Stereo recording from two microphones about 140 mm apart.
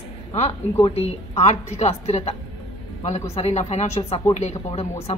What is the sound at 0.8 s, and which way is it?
A woman's voice, 45° left (ahead or behind).